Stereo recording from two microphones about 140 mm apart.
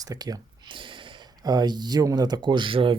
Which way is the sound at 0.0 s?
25° right (ahead or behind).